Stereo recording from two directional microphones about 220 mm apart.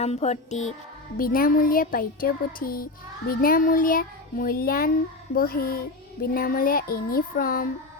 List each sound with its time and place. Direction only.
0.0 s child singing: 30° left (ahead or behind)